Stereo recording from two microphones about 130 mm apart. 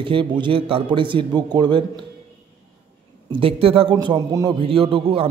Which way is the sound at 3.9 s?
35° right (ahead or behind).